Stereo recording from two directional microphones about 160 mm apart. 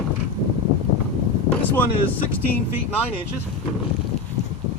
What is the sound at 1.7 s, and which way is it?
Speech, 10° left (ahead or behind).